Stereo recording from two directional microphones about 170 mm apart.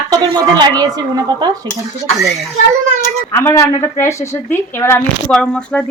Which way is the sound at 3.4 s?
15° left (ahead or behind).